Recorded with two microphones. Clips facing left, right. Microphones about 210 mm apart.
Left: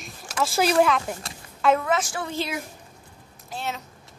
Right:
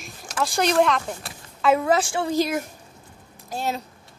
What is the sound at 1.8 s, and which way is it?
Speech, 30° right (ahead or behind).